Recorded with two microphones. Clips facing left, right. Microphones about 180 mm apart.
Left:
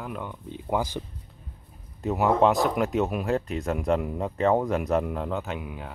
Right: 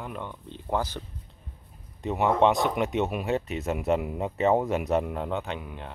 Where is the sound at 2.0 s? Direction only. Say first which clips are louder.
Left 1 dB; centre (ahead or behind).